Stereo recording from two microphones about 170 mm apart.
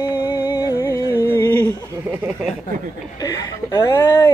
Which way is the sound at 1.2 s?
15° left (ahead or behind).